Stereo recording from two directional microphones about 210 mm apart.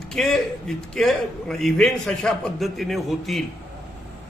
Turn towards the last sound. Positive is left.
turn(degrees=0)  # may be behind; listen again after turning